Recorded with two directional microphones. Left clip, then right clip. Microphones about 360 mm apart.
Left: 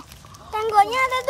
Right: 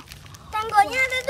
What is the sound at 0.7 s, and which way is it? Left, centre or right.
Speech, centre.